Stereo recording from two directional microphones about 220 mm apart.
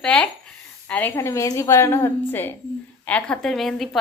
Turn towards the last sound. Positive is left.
turn(degrees=0)  # may be behind; listen again after turning